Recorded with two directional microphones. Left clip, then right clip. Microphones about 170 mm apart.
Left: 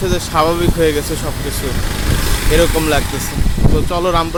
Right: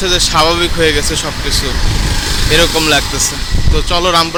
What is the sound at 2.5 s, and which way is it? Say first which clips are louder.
Speech: right 3 dB; 10° left (ahead or behind).